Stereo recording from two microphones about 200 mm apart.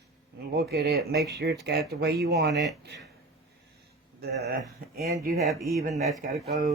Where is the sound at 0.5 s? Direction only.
55° right (ahead or behind).